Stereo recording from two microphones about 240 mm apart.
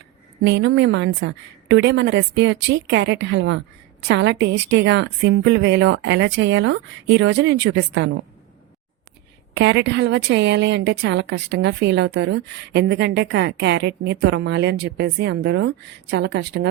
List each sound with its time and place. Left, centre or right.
0.4 s a woman's voice: right
9.6 s a woman's voice: right